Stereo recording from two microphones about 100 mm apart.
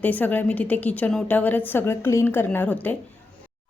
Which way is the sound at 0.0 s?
15° left (ahead or behind).